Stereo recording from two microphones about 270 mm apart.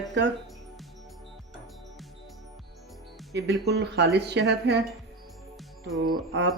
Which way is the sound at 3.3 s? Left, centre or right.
Right.